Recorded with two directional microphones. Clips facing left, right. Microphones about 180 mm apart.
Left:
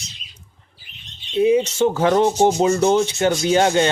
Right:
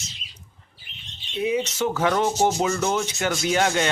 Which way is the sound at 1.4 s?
30° left (ahead or behind).